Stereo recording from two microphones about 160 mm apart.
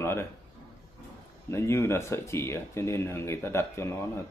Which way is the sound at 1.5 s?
15° left (ahead or behind).